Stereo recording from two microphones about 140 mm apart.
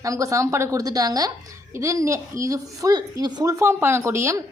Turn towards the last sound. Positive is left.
turn(degrees=-20)  # may be behind; listen again after turning